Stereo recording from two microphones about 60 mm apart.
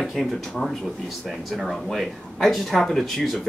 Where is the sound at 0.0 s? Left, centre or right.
Centre.